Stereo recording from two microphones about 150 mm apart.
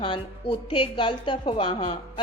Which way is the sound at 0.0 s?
35° left (ahead or behind).